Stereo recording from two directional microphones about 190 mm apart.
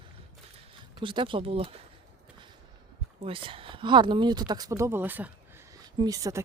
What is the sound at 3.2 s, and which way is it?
Speech, 30° right (ahead or behind).